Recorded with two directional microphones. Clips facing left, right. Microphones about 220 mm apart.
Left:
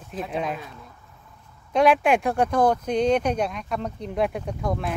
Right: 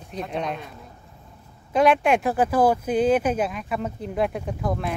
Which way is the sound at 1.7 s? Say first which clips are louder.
Even; centre (ahead or behind).